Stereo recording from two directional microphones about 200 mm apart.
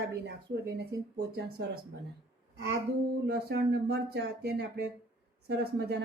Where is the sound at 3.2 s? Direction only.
55° right (ahead or behind).